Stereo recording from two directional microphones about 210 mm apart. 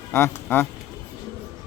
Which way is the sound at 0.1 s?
10° left (ahead or behind).